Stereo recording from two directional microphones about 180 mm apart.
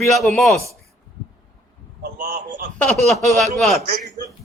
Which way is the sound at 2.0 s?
45° right (ahead or behind).